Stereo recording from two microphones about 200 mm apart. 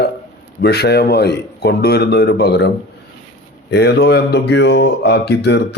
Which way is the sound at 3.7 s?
55° left (ahead or behind).